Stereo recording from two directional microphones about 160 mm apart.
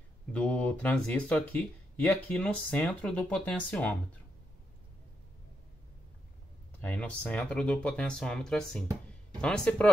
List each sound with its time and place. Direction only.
0.3 s speech: 10° left (ahead or behind)
6.8 s speech: 10° left (ahead or behind)